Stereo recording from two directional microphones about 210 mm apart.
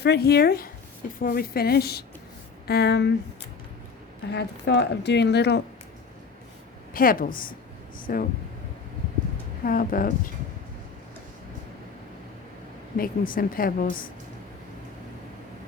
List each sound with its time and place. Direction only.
0.0 s a woman's voice: 50° left (ahead or behind)
4.3 s a woman's voice: 50° left (ahead or behind)
6.9 s a woman's voice: 40° left (ahead or behind)
9.6 s a woman's voice: 40° left (ahead or behind)
13.0 s a woman's voice: 40° left (ahead or behind)